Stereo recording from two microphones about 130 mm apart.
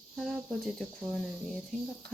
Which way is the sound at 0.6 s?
5° left (ahead or behind).